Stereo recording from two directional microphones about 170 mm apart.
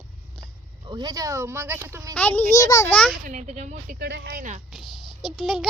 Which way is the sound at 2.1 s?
10° left (ahead or behind).